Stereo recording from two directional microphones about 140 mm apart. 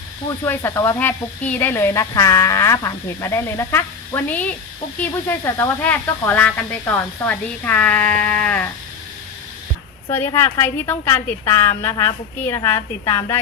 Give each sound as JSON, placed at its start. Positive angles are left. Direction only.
{"t": 0.4, "sound": "speech", "side_deg": 15}
{"t": 10.1, "sound": "speech", "side_deg": 15}